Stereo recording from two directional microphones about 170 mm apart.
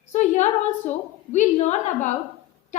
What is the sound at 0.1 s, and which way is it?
A woman's voice, 45° left (ahead or behind).